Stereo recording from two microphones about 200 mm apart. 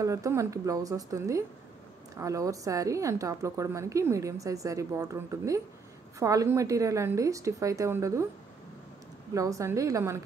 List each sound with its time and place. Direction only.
0.0 s a woman's voice: 15° right (ahead or behind)
9.3 s a woman's voice: 15° right (ahead or behind)